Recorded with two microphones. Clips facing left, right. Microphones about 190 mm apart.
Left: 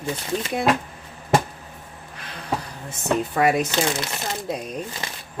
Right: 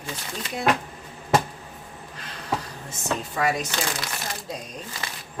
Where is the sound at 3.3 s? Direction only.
60° left (ahead or behind).